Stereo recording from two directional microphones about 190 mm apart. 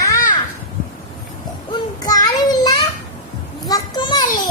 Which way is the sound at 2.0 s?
20° left (ahead or behind).